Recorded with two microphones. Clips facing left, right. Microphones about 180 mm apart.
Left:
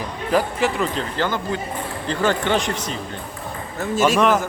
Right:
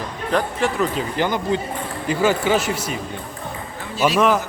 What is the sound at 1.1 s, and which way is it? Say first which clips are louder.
Speech: right 3 dB; 15° right (ahead or behind).